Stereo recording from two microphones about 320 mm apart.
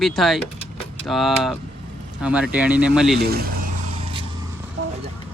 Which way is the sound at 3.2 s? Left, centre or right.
Right.